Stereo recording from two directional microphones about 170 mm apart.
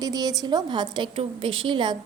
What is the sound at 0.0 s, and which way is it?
A woman's voice, 25° right (ahead or behind).